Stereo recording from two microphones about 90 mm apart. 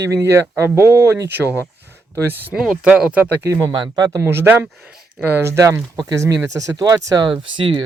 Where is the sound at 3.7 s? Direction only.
55° right (ahead or behind).